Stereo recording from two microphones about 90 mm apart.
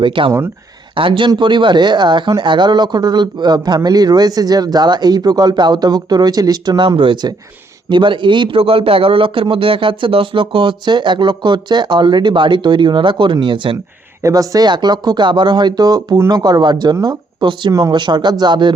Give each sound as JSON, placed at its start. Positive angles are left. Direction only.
{"t": 0.0, "sound": "a man's voice", "side_deg": -70}
{"t": 14.2, "sound": "speech", "side_deg": -40}
{"t": 17.7, "sound": "speech", "side_deg": -40}
{"t": 17.9, "sound": "a man's voice", "side_deg": -55}